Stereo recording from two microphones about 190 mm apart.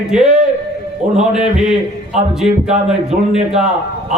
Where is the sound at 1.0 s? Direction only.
40° right (ahead or behind).